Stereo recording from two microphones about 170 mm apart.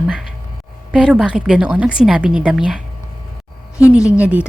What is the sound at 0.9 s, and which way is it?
A woman's voice, 5° right (ahead or behind).